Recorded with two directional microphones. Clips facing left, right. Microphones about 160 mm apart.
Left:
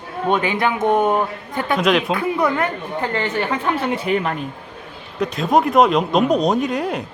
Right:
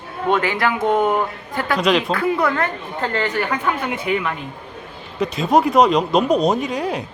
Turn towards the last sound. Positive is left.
turn(degrees=0)  # may be behind; listen again after turning